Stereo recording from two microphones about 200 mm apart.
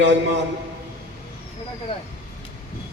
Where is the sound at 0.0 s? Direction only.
60° right (ahead or behind).